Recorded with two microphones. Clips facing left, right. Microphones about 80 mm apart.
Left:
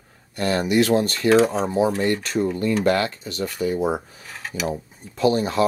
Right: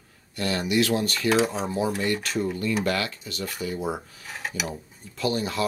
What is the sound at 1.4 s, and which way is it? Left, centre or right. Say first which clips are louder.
Speech: left 6 dB; left.